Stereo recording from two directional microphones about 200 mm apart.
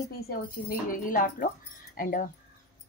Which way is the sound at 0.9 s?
45° left (ahead or behind).